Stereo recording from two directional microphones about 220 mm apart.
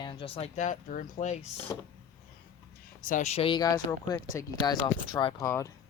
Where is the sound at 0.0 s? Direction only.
25° left (ahead or behind).